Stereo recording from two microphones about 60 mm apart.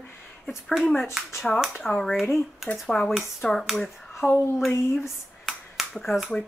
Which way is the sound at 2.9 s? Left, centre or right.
Centre.